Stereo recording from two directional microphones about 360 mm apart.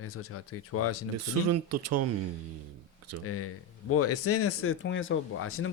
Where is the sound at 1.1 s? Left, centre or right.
Right.